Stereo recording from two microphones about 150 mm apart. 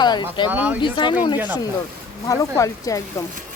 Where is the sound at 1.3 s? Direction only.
15° right (ahead or behind).